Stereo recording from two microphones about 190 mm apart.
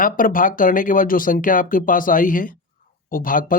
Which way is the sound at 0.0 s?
45° left (ahead or behind).